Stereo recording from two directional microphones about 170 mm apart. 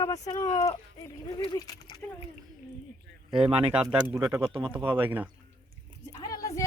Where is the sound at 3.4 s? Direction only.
5° right (ahead or behind).